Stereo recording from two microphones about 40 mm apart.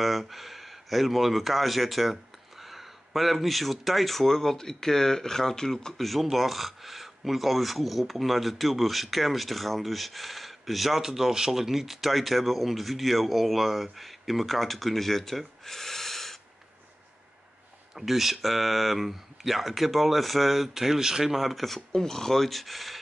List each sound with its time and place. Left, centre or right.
0.0 s speech: centre
5.9 s speech: centre
17.9 s speech: centre